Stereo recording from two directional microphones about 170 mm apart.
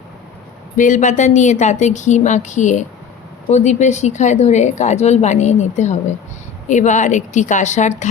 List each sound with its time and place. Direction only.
0.8 s a woman's voice: 45° left (ahead or behind)